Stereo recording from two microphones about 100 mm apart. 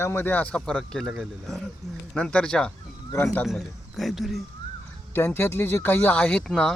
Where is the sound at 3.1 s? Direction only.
20° left (ahead or behind).